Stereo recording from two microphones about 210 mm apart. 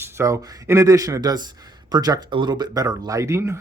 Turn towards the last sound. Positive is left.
turn(degrees=-15)  # may be behind; listen again after turning